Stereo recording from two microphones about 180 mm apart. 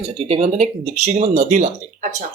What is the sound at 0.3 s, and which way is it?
Speech, 35° right (ahead or behind).